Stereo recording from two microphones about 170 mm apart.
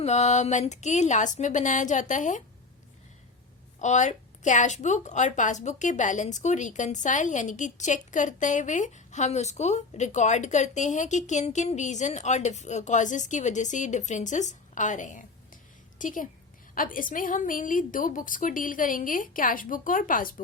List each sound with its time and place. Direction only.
0.0 s a woman's voice: 40° left (ahead or behind)
3.8 s a woman's voice: 45° left (ahead or behind)